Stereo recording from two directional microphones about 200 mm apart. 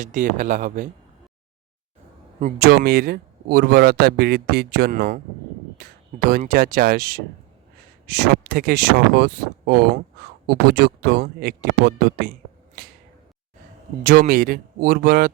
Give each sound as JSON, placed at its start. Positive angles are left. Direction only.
{"t": 0.0, "sound": "speech", "side_deg": -40}
{"t": 2.6, "sound": "speech", "side_deg": -50}
{"t": 14.0, "sound": "speech", "side_deg": -45}